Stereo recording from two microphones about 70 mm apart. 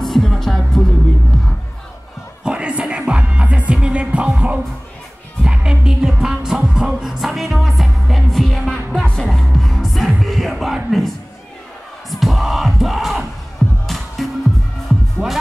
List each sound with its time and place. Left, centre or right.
0.0 s music: centre
2.4 s music: centre
15.2 s music: centre